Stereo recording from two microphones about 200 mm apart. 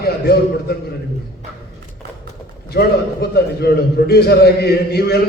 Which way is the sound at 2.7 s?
55° left (ahead or behind).